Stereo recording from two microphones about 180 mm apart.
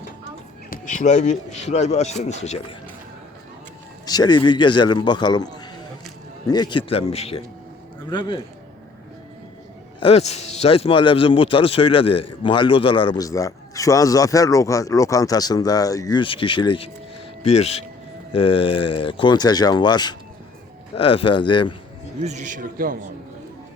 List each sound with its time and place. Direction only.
0.7 s speech: 45° left (ahead or behind)
4.0 s speech: 20° left (ahead or behind)
10.0 s speech: 35° left (ahead or behind)
22.2 s a man's voice: 40° right (ahead or behind)